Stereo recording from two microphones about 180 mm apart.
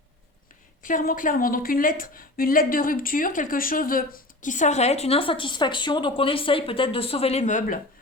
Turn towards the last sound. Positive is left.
turn(degrees=45)  # may be behind; listen again after turning